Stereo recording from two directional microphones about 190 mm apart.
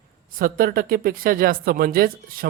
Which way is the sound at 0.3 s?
50° right (ahead or behind).